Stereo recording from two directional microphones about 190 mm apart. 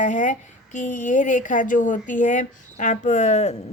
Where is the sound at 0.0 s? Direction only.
40° left (ahead or behind).